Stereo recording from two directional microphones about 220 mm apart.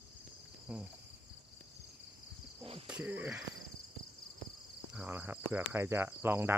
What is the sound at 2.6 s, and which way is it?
Cricket, 25° right (ahead or behind).